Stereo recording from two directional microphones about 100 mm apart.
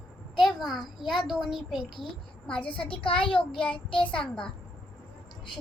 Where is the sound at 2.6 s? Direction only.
60° left (ahead or behind).